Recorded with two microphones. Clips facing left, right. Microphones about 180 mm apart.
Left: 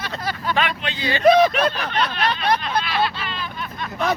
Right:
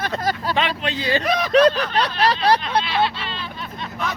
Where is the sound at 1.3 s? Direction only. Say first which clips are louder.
Left 9 dB; 30° left (ahead or behind).